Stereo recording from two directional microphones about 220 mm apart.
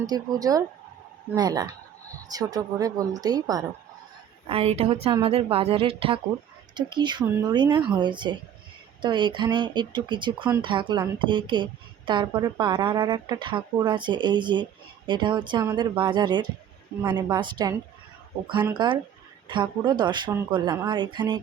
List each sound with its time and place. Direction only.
0.0 s a woman's voice: 15° right (ahead or behind)
18.8 s a woman's voice: 20° right (ahead or behind)